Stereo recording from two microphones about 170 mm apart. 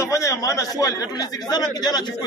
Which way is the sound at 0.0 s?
20° left (ahead or behind).